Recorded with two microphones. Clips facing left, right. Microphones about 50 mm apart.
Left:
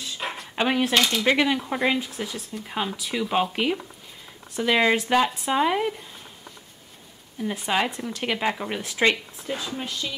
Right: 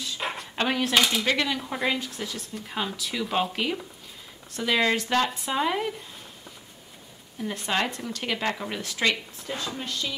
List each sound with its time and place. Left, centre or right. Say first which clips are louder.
0.0 s a sound: even; centre
0.6 s speech: left 3 dB; centre
0.9 s speech: right 3 dB; centre
1.2 s speech: left 5 dB; centre
7.3 s speech: left 3 dB; centre
9.5 s speech: left 2 dB; centre